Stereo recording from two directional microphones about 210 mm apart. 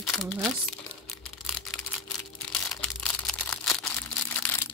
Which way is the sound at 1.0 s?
Centre (ahead or behind).